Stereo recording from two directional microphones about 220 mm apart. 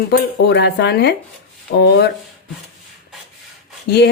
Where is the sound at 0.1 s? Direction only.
50° left (ahead or behind).